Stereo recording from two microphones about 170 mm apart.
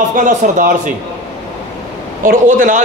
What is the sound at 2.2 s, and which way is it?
Speech, 50° right (ahead or behind).